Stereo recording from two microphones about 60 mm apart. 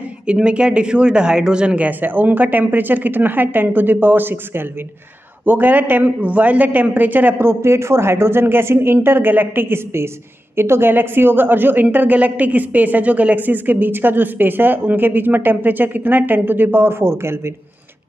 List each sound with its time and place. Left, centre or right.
0.3 s speech: centre
1.9 s a woman's voice: right